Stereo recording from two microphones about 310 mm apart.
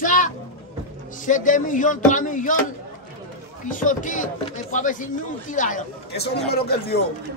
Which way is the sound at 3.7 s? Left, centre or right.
Left.